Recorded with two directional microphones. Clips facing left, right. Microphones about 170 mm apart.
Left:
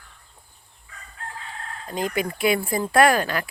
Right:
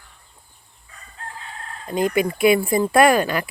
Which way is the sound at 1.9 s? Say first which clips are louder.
Right 6 dB; 10° right (ahead or behind).